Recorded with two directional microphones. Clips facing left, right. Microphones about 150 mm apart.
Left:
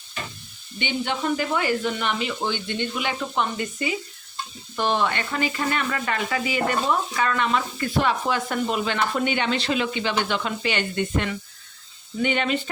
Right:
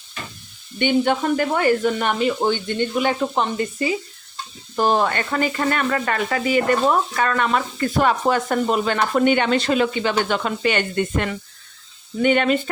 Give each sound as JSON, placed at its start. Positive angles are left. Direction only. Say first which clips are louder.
{"t": 0.8, "sound": "speech", "louder": "right 8 dB", "side_deg": -50}